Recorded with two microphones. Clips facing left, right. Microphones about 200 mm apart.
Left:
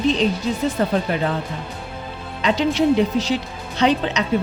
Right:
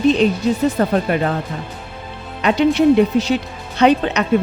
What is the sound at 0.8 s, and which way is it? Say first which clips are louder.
Speech: right 3 dB; 55° right (ahead or behind).